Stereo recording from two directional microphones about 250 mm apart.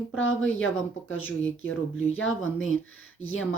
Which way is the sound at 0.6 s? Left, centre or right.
Left.